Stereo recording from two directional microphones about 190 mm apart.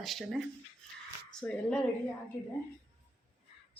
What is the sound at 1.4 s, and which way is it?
Speech, 10° left (ahead or behind).